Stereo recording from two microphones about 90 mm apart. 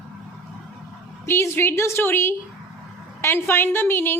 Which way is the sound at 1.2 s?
30° left (ahead or behind).